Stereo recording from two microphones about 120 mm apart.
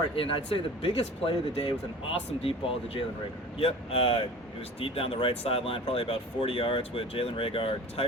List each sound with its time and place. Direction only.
0.2 s speech: 50° left (ahead or behind)